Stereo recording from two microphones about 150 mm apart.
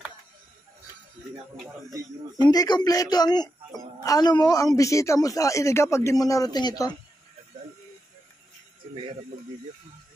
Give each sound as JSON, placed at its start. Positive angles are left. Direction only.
{"t": 1.9, "sound": "speech", "side_deg": -25}
{"t": 2.4, "sound": "speech", "side_deg": 25}